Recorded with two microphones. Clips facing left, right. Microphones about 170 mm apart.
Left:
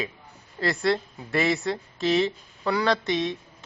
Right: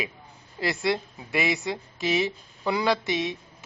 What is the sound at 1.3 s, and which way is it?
A woman's voice, centre (ahead or behind).